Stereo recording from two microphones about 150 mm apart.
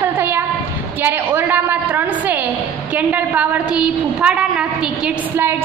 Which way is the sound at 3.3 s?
10° right (ahead or behind).